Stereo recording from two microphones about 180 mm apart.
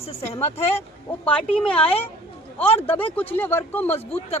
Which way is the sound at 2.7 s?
30° left (ahead or behind).